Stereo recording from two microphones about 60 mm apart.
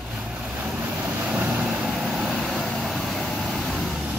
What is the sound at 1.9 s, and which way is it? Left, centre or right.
Vehicle, centre.